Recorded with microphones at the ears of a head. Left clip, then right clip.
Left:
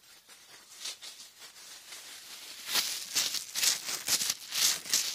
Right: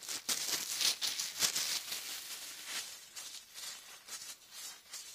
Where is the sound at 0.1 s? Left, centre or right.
Right.